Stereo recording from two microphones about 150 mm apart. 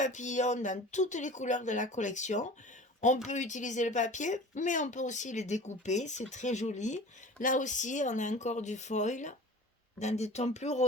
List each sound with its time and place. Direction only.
0.0 s speech: 55° left (ahead or behind)